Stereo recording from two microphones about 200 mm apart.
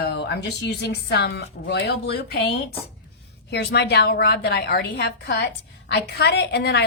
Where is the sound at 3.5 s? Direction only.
55° left (ahead or behind).